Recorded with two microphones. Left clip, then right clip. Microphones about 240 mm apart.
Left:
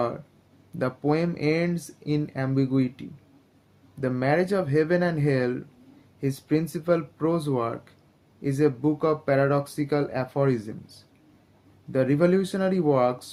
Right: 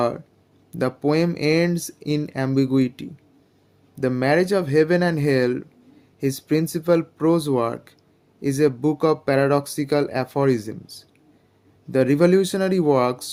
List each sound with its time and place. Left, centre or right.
0.8 s speech: right